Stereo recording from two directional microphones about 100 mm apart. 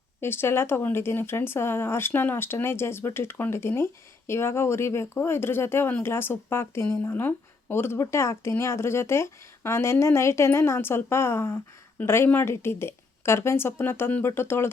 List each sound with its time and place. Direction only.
0.2 s speech: 25° left (ahead or behind)